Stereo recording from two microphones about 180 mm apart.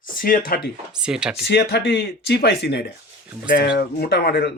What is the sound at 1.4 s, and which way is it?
Speech, 70° left (ahead or behind).